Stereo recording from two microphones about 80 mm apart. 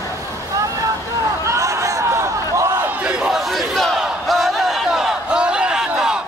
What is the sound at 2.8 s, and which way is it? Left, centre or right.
Battle cry, centre.